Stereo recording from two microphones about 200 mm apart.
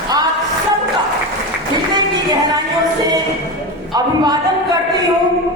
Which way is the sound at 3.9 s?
20° right (ahead or behind).